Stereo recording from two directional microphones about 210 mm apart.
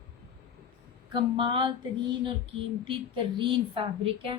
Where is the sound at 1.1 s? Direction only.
25° right (ahead or behind).